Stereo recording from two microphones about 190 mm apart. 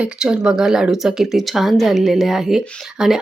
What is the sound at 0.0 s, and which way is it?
Speech, 5° right (ahead or behind).